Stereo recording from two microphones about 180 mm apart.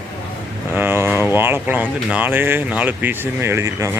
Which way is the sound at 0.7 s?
10° right (ahead or behind).